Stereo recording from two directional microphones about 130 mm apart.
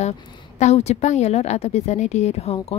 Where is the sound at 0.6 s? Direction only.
60° left (ahead or behind).